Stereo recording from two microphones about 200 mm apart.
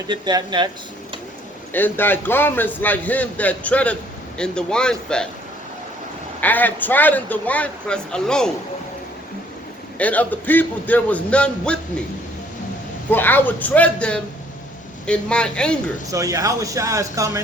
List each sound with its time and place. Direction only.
0.1 s speech: 20° right (ahead or behind)
1.7 s a man's voice: 10° left (ahead or behind)
6.4 s a man's voice: 10° left (ahead or behind)
10.0 s a man's voice: 10° left (ahead or behind)
13.1 s a man's voice: 10° left (ahead or behind)
16.1 s speech: 15° right (ahead or behind)